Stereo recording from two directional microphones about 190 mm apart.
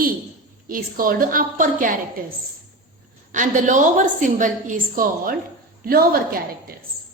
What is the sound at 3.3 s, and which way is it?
A woman's voice, 40° right (ahead or behind).